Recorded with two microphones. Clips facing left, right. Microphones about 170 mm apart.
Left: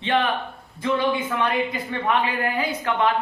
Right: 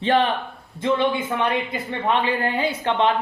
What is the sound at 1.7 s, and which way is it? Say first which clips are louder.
Speech: right 1 dB; 30° right (ahead or behind).